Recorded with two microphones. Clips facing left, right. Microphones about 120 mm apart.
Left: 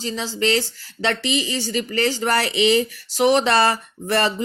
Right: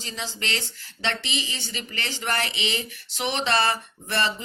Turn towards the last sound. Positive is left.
turn(degrees=40)  # may be behind; listen again after turning